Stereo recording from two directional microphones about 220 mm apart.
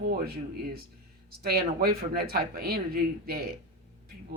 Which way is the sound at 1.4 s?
45° right (ahead or behind).